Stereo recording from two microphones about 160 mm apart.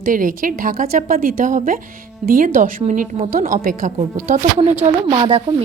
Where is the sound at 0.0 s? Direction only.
60° right (ahead or behind).